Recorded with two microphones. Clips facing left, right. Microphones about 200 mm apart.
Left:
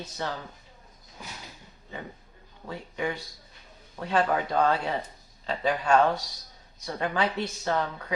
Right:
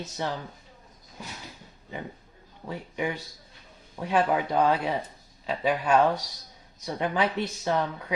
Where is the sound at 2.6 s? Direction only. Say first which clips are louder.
Right 1 dB; 15° right (ahead or behind).